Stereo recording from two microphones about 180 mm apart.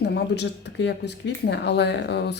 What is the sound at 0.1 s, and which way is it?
Speech, 70° left (ahead or behind).